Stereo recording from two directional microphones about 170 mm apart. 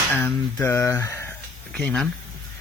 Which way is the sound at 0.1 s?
10° left (ahead or behind).